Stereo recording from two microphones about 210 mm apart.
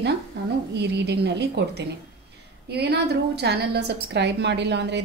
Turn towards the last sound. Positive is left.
turn(degrees=-55)  # may be behind; listen again after turning